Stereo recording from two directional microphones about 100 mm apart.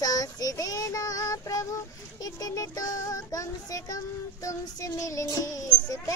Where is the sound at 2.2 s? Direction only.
35° left (ahead or behind).